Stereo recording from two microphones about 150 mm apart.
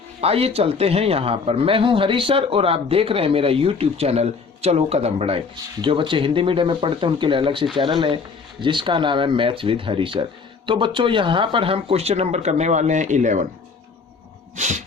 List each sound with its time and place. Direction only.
0.2 s a man's voice: 40° right (ahead or behind)
14.5 s speech: 55° right (ahead or behind)